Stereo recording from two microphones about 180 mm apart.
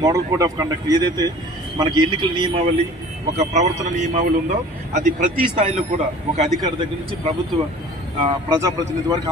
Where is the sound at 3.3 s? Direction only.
40° right (ahead or behind).